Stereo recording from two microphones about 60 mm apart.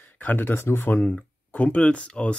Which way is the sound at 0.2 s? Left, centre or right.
Left.